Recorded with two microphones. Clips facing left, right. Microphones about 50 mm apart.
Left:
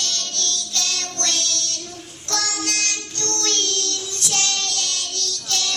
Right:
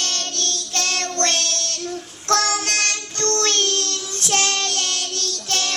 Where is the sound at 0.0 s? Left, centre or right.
Right.